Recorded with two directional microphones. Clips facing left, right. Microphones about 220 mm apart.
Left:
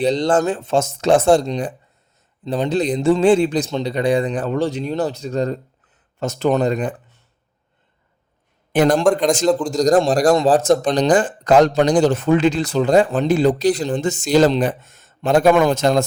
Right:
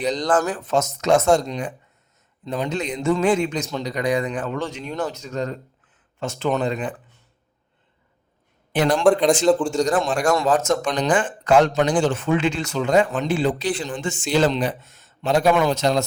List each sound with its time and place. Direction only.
0.0 s speech: 30° left (ahead or behind)
8.7 s a man's voice: 45° left (ahead or behind)
9.0 s a man's voice: centre (ahead or behind)
9.6 s speech: 40° left (ahead or behind)